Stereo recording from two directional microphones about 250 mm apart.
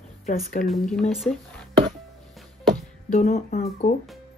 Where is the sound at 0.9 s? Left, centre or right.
Centre.